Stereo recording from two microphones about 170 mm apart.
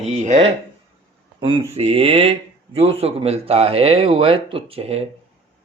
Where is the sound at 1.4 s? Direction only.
30° right (ahead or behind).